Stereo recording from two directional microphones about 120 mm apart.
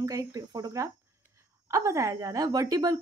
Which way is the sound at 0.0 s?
25° right (ahead or behind).